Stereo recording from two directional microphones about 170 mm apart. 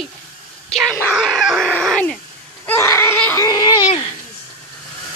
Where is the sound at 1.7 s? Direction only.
5° left (ahead or behind).